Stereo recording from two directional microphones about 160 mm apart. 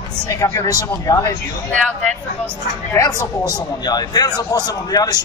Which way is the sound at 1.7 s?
10° left (ahead or behind).